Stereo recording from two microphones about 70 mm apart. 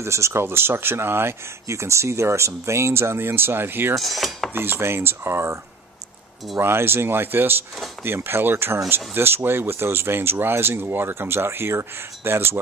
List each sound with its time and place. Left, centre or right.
0.0 s speech: right
4.0 s cutlery: centre
4.6 s speech: right
6.6 s speech: right